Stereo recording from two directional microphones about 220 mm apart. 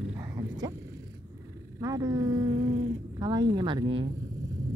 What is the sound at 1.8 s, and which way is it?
Speech, 15° right (ahead or behind).